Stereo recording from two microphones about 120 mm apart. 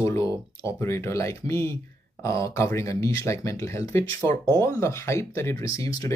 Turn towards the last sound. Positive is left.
turn(degrees=30)  # may be behind; listen again after turning